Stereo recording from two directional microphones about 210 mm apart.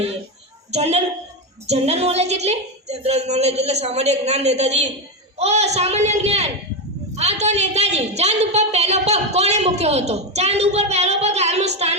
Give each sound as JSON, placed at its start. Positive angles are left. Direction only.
{"t": 0.7, "sound": "a woman's voice", "side_deg": -30}